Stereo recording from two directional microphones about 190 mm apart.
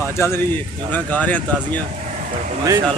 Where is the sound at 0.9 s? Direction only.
10° left (ahead or behind).